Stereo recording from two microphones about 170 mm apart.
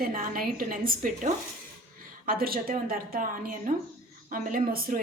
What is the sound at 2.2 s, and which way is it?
A woman's voice, 60° right (ahead or behind).